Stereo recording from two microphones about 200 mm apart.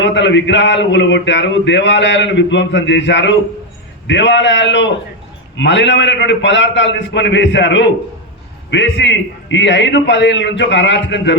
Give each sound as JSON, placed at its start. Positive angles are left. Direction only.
{"t": 0.0, "sound": "a man's voice", "side_deg": 65}